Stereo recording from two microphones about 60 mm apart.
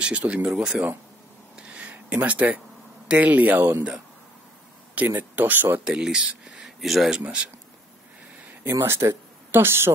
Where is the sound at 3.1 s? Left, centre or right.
Right.